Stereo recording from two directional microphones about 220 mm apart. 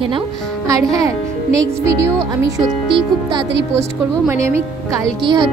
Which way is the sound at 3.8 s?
15° right (ahead or behind).